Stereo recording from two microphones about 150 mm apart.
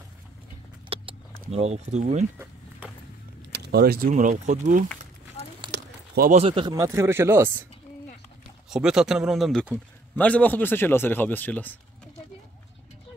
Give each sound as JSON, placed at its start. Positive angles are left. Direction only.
{"t": 0.8, "sound": "a sound", "side_deg": -40}
{"t": 1.5, "sound": "speech", "side_deg": -45}
{"t": 3.6, "sound": "speech", "side_deg": -90}
{"t": 4.1, "sound": "speech", "side_deg": -55}
{"t": 6.3, "sound": "speech", "side_deg": -35}
{"t": 6.7, "sound": "speech", "side_deg": -20}
{"t": 8.6, "sound": "a man's voice", "side_deg": -5}